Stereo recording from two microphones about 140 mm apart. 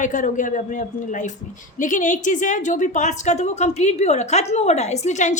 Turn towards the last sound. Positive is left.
turn(degrees=55)  # may be behind; listen again after turning